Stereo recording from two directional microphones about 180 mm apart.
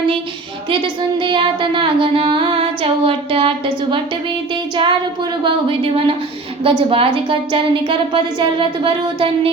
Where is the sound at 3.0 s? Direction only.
30° right (ahead or behind).